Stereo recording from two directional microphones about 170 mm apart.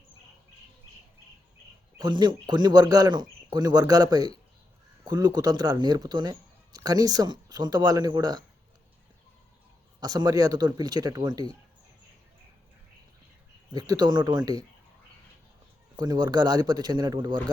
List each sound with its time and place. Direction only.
2.0 s speech: 25° right (ahead or behind)
10.0 s speech: 20° right (ahead or behind)
13.7 s speech: 20° right (ahead or behind)
16.0 s speech: 25° right (ahead or behind)